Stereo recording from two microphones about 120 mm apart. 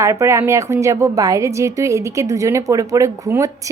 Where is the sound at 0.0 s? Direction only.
25° right (ahead or behind).